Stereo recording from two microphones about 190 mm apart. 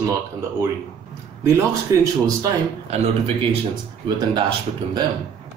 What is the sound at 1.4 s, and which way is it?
A man's voice, 15° right (ahead or behind).